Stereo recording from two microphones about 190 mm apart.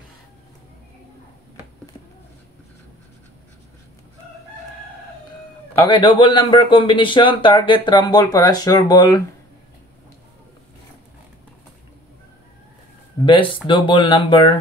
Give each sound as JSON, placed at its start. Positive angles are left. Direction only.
{"t": 5.9, "sound": "a man's voice", "side_deg": 25}
{"t": 13.2, "sound": "a man's voice", "side_deg": 25}